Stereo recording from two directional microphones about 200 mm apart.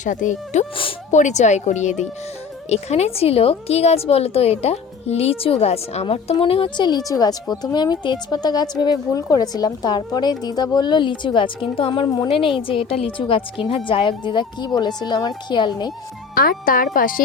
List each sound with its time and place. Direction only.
0.0 s a woman's voice: 40° left (ahead or behind); by 15.9 s 20° left (ahead or behind)
16.3 s speech: 45° left (ahead or behind)